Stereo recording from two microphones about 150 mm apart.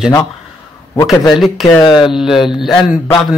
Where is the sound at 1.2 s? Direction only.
Centre (ahead or behind).